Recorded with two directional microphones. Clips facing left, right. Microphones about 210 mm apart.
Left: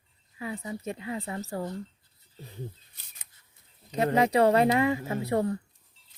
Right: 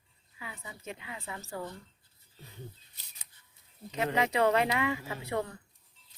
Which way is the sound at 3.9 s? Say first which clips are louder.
Left 6 dB; 40° left (ahead or behind).